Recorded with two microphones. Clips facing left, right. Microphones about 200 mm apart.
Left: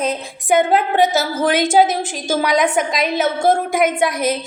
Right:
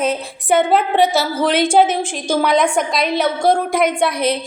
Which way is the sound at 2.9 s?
45° left (ahead or behind).